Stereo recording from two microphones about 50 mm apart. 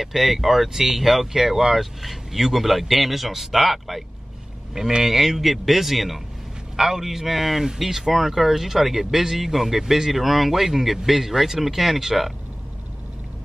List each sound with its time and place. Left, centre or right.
0.0 s speech: centre